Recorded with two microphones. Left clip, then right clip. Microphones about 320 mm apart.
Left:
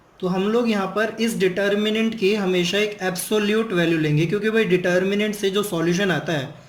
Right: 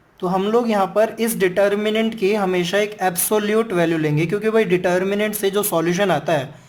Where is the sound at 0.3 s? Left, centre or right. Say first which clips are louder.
Right 3 dB; right.